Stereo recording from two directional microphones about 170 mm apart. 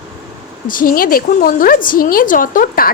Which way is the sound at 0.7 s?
55° left (ahead or behind).